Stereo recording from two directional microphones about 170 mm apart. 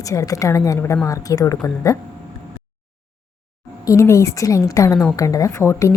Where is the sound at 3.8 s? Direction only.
20° left (ahead or behind).